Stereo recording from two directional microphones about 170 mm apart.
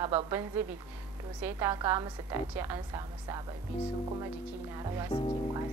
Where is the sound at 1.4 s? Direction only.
15° right (ahead or behind).